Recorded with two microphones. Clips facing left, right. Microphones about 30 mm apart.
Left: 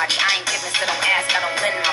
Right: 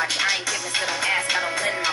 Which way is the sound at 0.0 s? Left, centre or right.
Left.